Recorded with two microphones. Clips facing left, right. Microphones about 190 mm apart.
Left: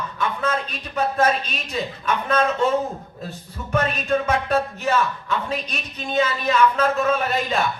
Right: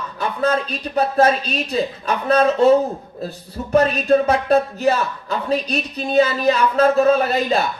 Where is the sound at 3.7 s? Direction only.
35° right (ahead or behind).